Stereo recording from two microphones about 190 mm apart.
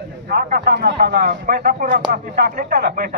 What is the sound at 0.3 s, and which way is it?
A man's voice, 55° right (ahead or behind).